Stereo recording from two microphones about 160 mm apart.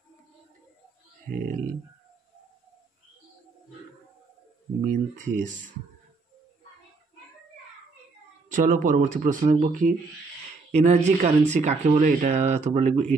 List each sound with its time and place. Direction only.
1.3 s speech: 60° right (ahead or behind)
4.8 s speech: 50° right (ahead or behind)
8.5 s speech: 55° right (ahead or behind)
10.7 s speech: 45° right (ahead or behind)